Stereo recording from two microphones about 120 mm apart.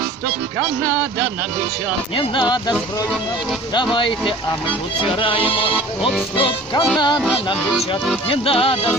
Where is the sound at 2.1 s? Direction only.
40° left (ahead or behind).